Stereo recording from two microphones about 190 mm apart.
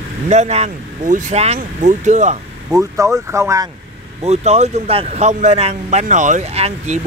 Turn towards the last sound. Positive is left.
turn(degrees=-35)  # may be behind; listen again after turning